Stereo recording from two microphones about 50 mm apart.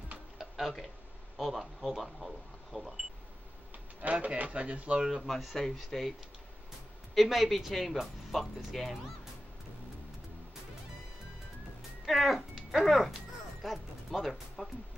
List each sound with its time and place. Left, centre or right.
0.4 s tick-tock: centre
1.4 s speech: centre
4.0 s speech: right
4.9 s speech: centre
5.2 s speech: centre
7.2 s speech: centre
12.1 s speech: centre